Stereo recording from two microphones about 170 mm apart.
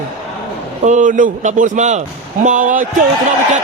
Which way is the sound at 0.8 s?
50° right (ahead or behind).